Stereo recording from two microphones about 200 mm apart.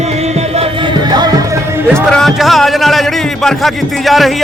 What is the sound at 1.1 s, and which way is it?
Music, 20° right (ahead or behind).